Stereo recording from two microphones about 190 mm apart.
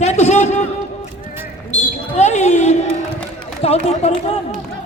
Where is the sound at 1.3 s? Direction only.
20° right (ahead or behind).